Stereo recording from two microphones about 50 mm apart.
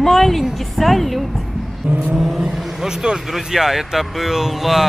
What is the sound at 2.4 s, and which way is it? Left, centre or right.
Vehicle, centre.